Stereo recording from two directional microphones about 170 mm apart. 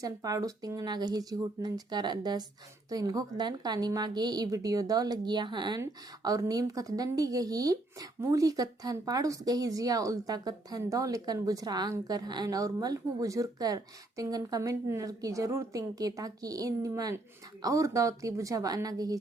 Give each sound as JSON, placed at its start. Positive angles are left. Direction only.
{"t": 0.0, "sound": "a woman's voice", "side_deg": -20}